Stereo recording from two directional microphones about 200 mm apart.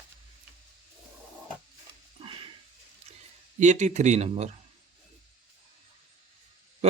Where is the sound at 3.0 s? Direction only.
30° right (ahead or behind).